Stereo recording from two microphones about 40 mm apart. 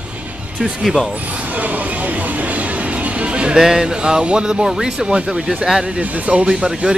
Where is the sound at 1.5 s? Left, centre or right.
Right.